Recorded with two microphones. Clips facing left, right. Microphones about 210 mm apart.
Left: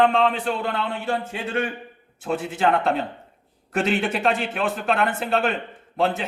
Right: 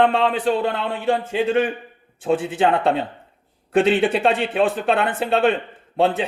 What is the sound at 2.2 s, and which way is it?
Speech, 30° right (ahead or behind).